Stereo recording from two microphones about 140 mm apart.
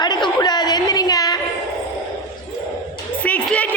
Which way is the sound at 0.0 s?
30° left (ahead or behind).